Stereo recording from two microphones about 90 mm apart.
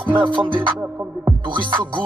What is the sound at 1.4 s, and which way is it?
Music, 65° right (ahead or behind).